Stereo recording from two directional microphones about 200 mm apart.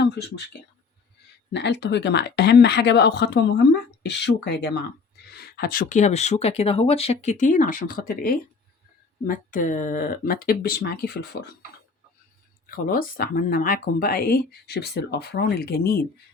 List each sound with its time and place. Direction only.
0.0 s speech: 55° left (ahead or behind)
1.5 s speech: 60° left (ahead or behind)
12.6 s speech: 45° left (ahead or behind)